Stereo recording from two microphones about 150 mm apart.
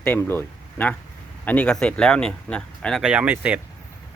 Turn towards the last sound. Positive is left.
turn(degrees=-10)  # may be behind; listen again after turning